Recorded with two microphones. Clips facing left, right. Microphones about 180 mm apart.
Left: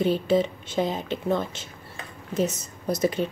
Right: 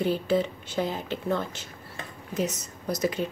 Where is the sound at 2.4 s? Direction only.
30° left (ahead or behind).